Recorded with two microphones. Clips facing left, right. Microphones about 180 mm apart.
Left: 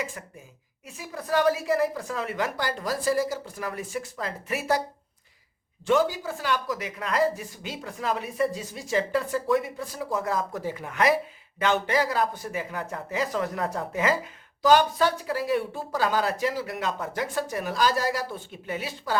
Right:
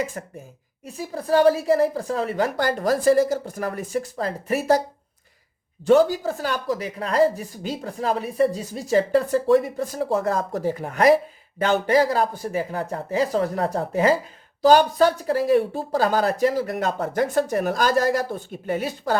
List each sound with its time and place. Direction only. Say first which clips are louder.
0.0 s speech: right 6 dB; 40° right (ahead or behind)
2.6 s speech: right 8 dB; 50° right (ahead or behind)
5.8 s speech: right 7 dB; 40° right (ahead or behind)